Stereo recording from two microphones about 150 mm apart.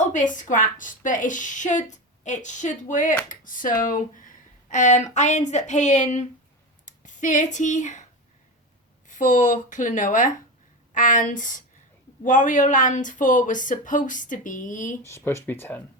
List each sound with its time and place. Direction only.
0.0 s speech: 55° left (ahead or behind)
9.0 s speech: 55° left (ahead or behind)
15.0 s speech: 15° left (ahead or behind)